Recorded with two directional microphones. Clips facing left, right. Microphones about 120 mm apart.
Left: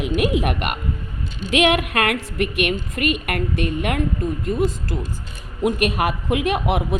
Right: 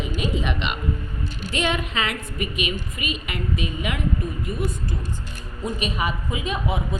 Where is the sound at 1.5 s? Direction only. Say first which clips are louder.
Left 8 dB; 70° left (ahead or behind).